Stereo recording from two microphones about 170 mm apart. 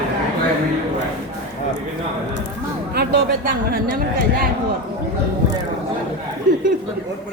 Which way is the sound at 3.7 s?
65° right (ahead or behind).